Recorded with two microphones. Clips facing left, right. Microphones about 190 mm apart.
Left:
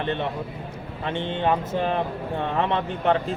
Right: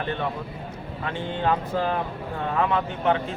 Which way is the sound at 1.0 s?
25° left (ahead or behind).